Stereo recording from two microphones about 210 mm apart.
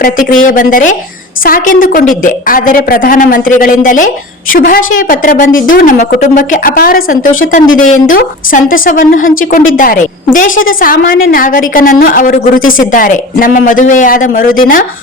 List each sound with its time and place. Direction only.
0.0 s a woman's voice: 40° left (ahead or behind)